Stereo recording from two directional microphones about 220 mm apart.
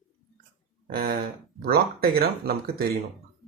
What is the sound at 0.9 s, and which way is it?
Speech, 45° right (ahead or behind).